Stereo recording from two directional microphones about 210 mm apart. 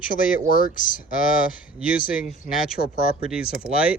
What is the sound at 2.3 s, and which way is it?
Speech, centre (ahead or behind).